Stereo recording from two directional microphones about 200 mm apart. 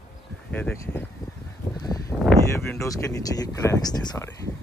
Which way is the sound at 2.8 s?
15° left (ahead or behind).